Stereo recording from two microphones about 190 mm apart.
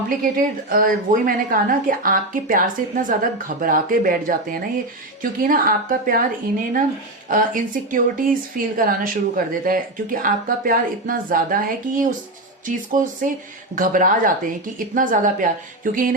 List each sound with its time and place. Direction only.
0.3 s speech: 50° right (ahead or behind)
7.3 s speech: 45° right (ahead or behind)